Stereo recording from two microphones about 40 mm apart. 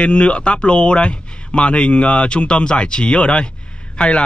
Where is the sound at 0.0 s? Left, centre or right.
Left.